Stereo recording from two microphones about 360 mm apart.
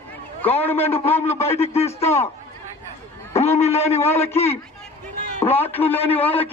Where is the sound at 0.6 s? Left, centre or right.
Centre.